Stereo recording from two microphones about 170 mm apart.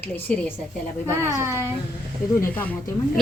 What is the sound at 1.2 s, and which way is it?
Speech, 15° right (ahead or behind).